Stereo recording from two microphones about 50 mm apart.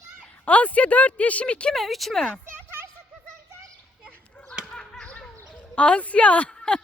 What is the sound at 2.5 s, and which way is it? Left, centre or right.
Children playing, right.